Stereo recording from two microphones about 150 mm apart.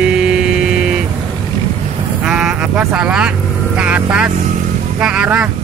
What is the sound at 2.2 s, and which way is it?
Speech, 5° right (ahead or behind).